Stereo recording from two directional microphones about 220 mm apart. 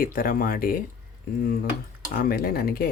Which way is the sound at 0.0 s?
40° left (ahead or behind).